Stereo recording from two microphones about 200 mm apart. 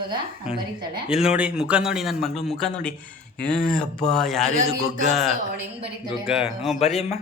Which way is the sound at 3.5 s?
5° left (ahead or behind).